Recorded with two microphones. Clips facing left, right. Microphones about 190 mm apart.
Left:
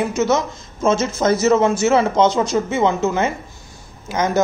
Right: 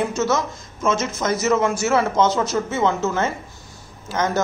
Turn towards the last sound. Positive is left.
turn(degrees=10)  # may be behind; listen again after turning